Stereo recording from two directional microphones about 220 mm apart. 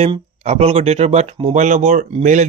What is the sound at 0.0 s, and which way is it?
Speech, 30° right (ahead or behind).